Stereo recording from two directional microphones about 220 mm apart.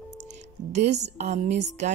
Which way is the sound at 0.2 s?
30° right (ahead or behind).